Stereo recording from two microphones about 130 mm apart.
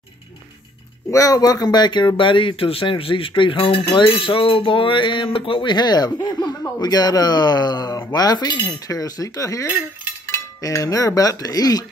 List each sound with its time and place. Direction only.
1.1 s speech: 25° left (ahead or behind)
10.2 s cutlery: 25° left (ahead or behind)